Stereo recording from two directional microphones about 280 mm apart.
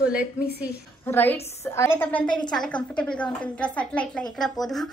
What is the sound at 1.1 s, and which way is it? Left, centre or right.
A woman's voice, centre.